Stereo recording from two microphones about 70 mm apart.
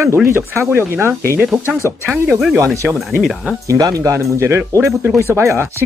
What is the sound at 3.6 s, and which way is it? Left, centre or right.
Speech, right.